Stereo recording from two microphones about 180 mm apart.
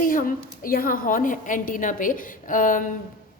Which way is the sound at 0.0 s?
50° left (ahead or behind).